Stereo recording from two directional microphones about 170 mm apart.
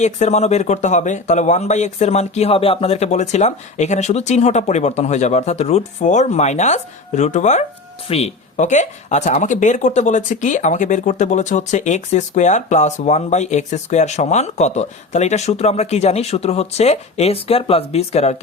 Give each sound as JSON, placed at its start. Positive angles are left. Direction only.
{"t": 0.0, "sound": "speech", "side_deg": 40}